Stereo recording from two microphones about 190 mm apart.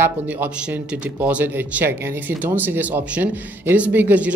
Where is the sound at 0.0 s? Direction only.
10° right (ahead or behind).